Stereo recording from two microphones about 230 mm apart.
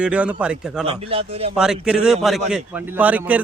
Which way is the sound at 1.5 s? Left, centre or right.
Centre.